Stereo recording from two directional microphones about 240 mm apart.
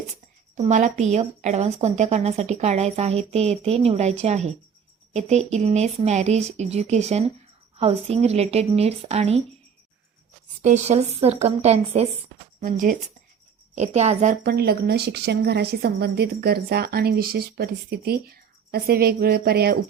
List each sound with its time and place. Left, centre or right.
0.5 s a woman's voice: right
10.6 s a woman's voice: right
14.4 s a woman's voice: right